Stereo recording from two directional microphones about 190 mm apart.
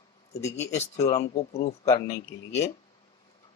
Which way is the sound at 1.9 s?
15° left (ahead or behind).